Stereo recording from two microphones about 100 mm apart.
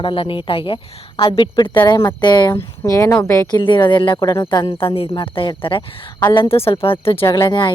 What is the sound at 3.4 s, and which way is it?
Speech, 50° left (ahead or behind).